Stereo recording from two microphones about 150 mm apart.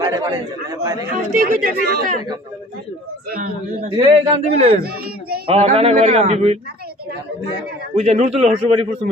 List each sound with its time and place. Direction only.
0.0 s speech: 25° right (ahead or behind)
1.4 s speech: 80° right
3.2 s a man's voice: 90° right
3.9 s a man's voice: 40° right (ahead or behind)
7.9 s a man's voice: 50° right (ahead or behind)